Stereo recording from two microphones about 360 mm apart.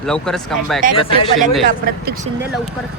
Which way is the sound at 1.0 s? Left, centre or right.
Centre.